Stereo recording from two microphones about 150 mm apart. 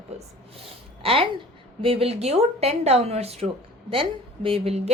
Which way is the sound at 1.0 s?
35° right (ahead or behind).